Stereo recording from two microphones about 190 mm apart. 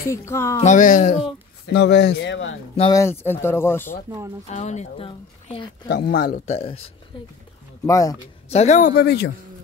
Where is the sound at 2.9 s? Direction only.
15° left (ahead or behind).